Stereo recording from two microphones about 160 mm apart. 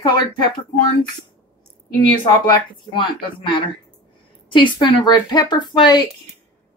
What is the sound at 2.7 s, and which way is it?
A woman's voice, 30° left (ahead or behind).